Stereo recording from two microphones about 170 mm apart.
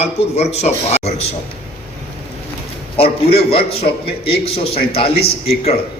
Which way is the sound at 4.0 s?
35° left (ahead or behind).